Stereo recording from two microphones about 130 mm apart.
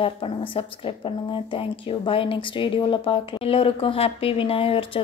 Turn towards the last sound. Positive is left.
turn(degrees=45)  # may be behind; listen again after turning